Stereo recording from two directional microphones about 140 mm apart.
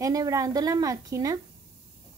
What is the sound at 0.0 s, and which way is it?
Speech, 25° right (ahead or behind).